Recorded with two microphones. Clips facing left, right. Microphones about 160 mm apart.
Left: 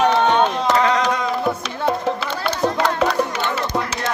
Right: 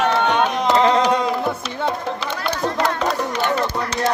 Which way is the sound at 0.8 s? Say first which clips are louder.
Right 3 dB; 30° right (ahead or behind).